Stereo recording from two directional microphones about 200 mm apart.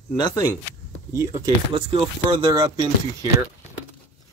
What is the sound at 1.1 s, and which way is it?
Speech, 15° right (ahead or behind).